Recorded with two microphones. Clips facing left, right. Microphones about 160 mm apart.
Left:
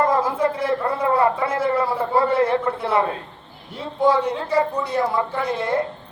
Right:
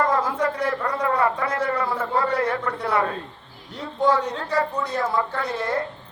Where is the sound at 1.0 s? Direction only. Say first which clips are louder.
Left 3 dB; 25° left (ahead or behind).